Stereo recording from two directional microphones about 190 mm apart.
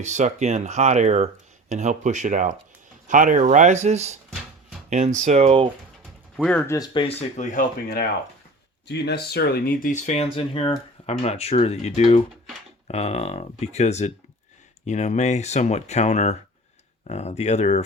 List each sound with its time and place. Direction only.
0.0 s speech: 40° right (ahead or behind)
6.3 s speech: centre (ahead or behind)
6.7 s speech: 20° left (ahead or behind)
7.1 s speech: 35° left (ahead or behind)
8.9 s speech: 60° left (ahead or behind); by 10.2 s 40° left (ahead or behind)
10.3 s speech: 30° left (ahead or behind)